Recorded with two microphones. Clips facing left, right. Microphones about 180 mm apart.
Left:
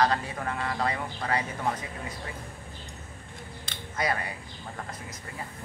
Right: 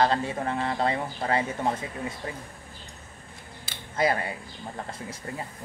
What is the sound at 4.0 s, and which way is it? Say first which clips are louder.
Speech: right 5 dB; 25° right (ahead or behind).